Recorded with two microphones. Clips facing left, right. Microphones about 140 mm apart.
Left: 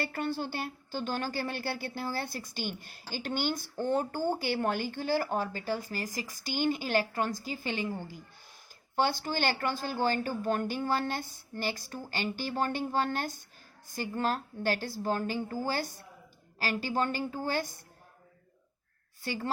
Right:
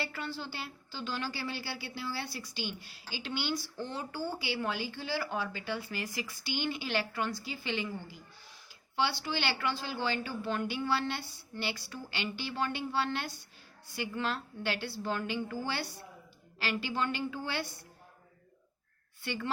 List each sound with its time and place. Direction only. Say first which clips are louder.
0.0 s speech: left 6 dB; 50° left (ahead or behind)
19.2 s a woman's voice: left 2 dB; 40° left (ahead or behind)